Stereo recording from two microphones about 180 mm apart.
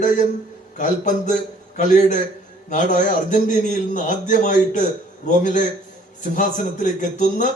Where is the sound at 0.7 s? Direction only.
40° left (ahead or behind).